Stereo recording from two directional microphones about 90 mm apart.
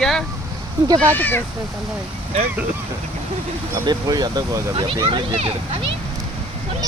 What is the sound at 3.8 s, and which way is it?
Speech, 50° right (ahead or behind).